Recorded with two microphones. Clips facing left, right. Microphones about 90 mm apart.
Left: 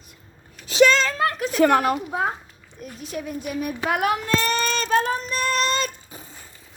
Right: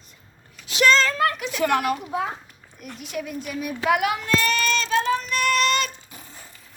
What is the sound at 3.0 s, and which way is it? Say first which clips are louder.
A child's voice: left 1 dB; 35° left (ahead or behind).